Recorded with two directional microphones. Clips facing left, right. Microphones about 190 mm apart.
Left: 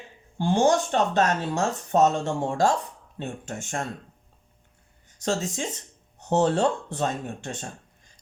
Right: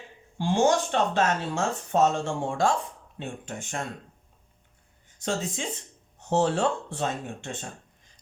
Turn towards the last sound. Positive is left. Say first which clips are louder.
# left 2 dB
turn(degrees=40)  # may be behind; listen again after turning